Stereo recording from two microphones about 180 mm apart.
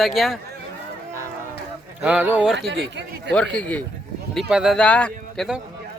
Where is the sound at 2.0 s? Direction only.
10° right (ahead or behind).